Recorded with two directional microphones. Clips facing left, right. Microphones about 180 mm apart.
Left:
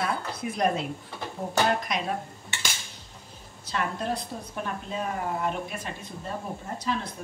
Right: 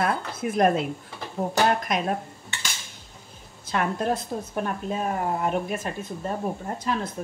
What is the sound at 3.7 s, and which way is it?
A woman's voice, 50° right (ahead or behind).